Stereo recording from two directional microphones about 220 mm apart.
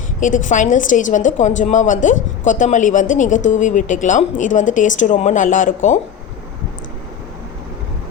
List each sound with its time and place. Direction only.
0.2 s speech: 35° left (ahead or behind)